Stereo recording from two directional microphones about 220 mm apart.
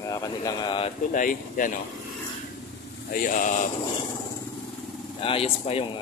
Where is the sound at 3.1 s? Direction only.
40° left (ahead or behind).